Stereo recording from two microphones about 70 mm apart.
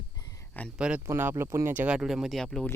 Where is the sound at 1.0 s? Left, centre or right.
Right.